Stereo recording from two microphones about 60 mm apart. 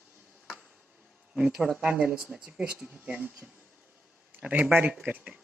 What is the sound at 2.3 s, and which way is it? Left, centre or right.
Speech, centre.